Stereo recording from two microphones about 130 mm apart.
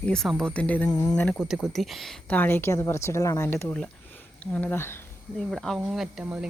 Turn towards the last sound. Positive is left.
turn(degrees=-10)  # may be behind; listen again after turning